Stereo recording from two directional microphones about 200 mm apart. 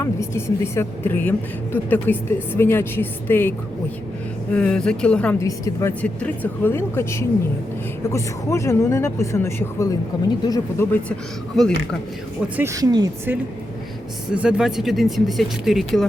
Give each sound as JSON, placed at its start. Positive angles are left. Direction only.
{"t": 0.0, "sound": "a woman's voice", "side_deg": 15}
{"t": 4.5, "sound": "a woman's voice", "side_deg": 5}
{"t": 11.6, "sound": "speech", "side_deg": 0}
{"t": 12.5, "sound": "speech", "side_deg": -15}
{"t": 14.3, "sound": "speech", "side_deg": -5}